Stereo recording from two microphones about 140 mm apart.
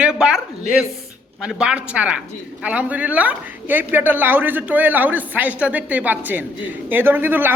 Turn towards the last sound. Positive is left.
turn(degrees=-15)  # may be behind; listen again after turning